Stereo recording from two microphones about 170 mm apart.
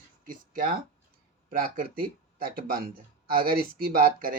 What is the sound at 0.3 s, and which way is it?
Speech, 55° right (ahead or behind).